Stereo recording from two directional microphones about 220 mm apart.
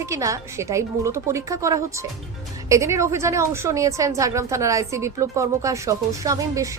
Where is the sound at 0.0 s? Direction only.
15° right (ahead or behind).